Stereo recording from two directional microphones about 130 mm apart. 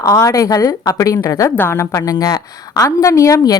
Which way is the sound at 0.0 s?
25° left (ahead or behind).